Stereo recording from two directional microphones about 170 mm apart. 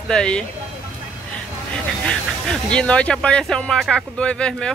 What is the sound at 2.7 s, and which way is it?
Speech, 5° left (ahead or behind).